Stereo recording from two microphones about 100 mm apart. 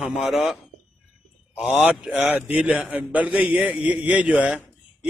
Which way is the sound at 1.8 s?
10° right (ahead or behind).